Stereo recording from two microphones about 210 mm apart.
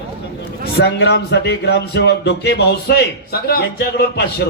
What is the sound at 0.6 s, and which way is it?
A man's voice, 50° left (ahead or behind).